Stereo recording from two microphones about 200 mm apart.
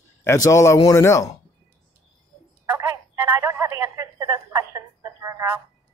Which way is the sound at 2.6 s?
10° right (ahead or behind).